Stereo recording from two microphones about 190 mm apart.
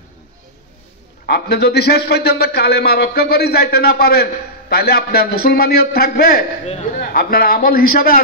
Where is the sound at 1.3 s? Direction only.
60° left (ahead or behind).